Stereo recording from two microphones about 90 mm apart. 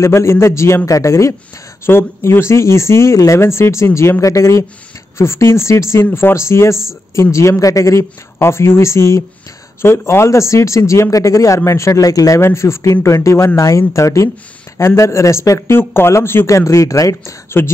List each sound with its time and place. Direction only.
0.0 s speech: 30° left (ahead or behind)
17.5 s speech: 25° left (ahead or behind)